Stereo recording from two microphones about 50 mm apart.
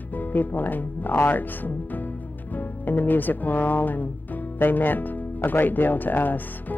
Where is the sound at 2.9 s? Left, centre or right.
Left.